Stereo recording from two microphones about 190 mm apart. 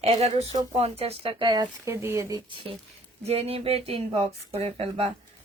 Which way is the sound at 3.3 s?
30° right (ahead or behind).